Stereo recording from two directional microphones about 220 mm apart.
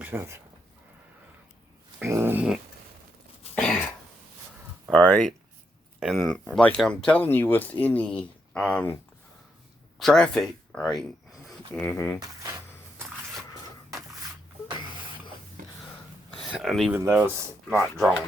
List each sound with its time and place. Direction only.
0.0 s speech: 10° right (ahead or behind)
2.0 s dog: 10° right (ahead or behind)
3.5 s throat clearing: 5° left (ahead or behind)
4.9 s speech: 5° left (ahead or behind)
10.0 s speech: 5° left (ahead or behind)
15.6 s a sound: 35° right (ahead or behind)
16.3 s a sound: centre (ahead or behind)
17.0 s speech: 10° right (ahead or behind)
17.7 s speech: 5° left (ahead or behind)